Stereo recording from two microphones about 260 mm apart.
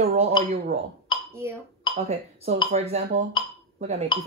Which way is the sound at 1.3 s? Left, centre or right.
Centre.